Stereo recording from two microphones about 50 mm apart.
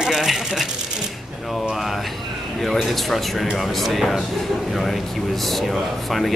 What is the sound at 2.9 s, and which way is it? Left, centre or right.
Speech, centre.